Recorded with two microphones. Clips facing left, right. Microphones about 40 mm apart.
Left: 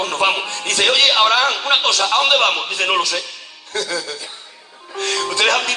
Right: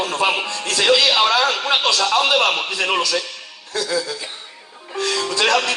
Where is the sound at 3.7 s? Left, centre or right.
Left.